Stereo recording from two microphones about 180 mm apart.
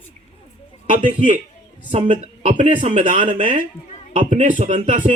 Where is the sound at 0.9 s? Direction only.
45° right (ahead or behind).